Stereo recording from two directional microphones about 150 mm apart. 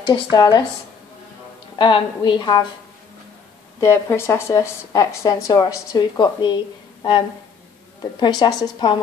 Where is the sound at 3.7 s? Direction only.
15° left (ahead or behind).